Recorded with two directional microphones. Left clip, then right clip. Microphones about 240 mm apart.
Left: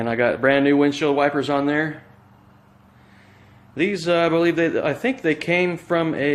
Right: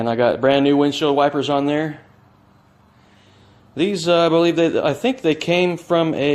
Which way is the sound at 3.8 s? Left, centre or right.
Centre.